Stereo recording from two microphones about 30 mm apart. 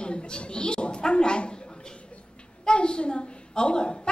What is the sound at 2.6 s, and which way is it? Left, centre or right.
A woman's voice, left.